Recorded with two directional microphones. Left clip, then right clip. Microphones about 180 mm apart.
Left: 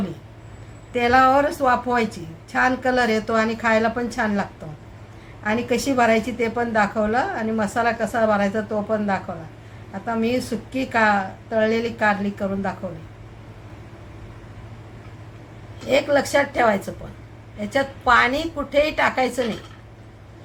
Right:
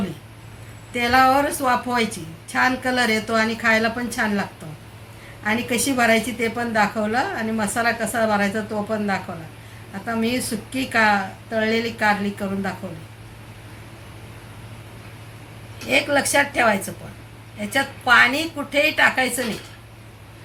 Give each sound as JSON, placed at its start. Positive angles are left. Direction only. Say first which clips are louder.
{"t": 0.9, "sound": "a woman's voice", "louder": "left 1 dB", "side_deg": 10}
{"t": 15.9, "sound": "a woman's voice", "louder": "left 1 dB", "side_deg": 15}
{"t": 17.7, "sound": "a woman's voice", "louder": "right 1 dB", "side_deg": 10}